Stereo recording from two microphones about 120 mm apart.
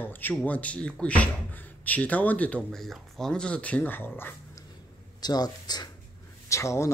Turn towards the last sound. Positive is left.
turn(degrees=25)  # may be behind; listen again after turning